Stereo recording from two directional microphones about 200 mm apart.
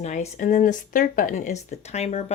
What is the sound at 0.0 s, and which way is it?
Speech, 35° left (ahead or behind).